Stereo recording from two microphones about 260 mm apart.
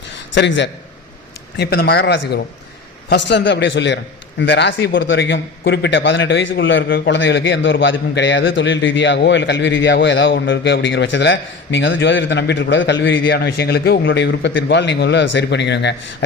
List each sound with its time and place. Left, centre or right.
0.3 s a man's voice: left